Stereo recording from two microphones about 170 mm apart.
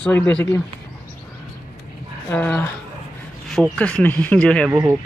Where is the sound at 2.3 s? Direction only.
10° left (ahead or behind).